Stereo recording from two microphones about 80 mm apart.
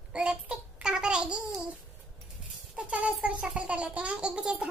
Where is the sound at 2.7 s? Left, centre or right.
Centre.